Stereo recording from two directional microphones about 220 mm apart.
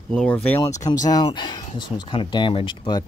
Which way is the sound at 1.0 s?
20° left (ahead or behind).